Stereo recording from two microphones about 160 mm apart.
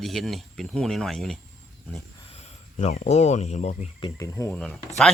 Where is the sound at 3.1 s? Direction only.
45° left (ahead or behind).